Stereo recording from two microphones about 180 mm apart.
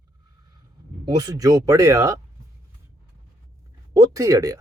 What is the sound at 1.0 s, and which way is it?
A man's voice, 20° right (ahead or behind).